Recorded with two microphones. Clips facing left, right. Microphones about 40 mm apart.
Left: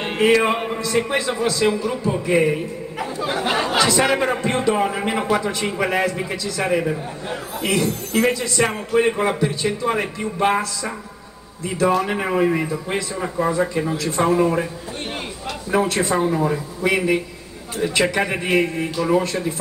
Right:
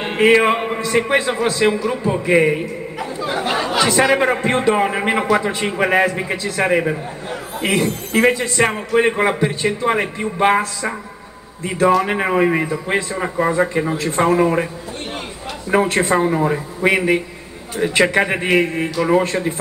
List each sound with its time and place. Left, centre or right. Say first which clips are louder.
0.2 s a man's voice: right 4 dB; right
3.0 s chatter: even; centre
3.6 s a man's voice: right 3 dB; right
15.7 s a man's voice: right 4 dB; right
16.2 s a man's voice: right 3 dB; right